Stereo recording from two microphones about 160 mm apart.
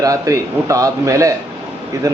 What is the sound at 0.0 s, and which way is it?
A man's voice, 20° right (ahead or behind).